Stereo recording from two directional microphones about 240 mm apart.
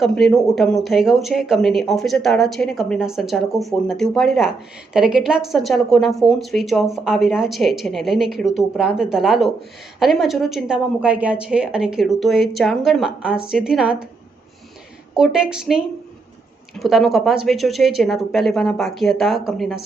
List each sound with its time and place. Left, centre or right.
0.0 s speech: centre
15.1 s speech: centre